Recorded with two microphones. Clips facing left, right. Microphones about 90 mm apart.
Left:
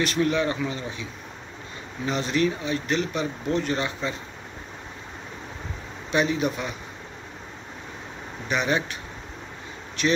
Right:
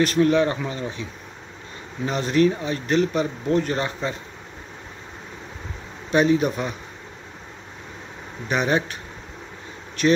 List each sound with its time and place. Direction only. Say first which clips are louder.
0.0 s speech: right 5 dB; 45° right (ahead or behind)
2.0 s speech: right 4 dB; 45° right (ahead or behind)
6.1 s speech: right 5 dB; 40° right (ahead or behind)
8.5 s speech: right 3 dB; 40° right (ahead or behind)